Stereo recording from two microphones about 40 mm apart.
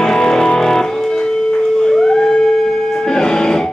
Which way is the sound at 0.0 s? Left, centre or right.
Centre.